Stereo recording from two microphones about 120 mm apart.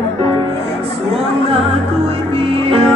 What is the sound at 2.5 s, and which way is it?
Music, 50° right (ahead or behind).